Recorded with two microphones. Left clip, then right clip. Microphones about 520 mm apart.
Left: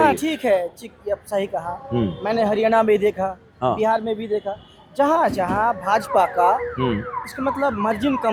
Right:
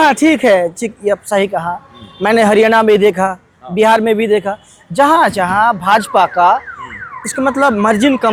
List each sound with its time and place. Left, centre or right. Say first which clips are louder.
0.0 s a woman's voice: right 9 dB; right
3.8 s a man's voice: right 16 dB; right
4.9 s a woman's voice: right 8 dB; right